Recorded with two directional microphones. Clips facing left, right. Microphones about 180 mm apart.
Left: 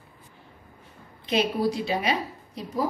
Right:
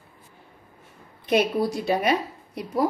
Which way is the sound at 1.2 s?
55° right (ahead or behind).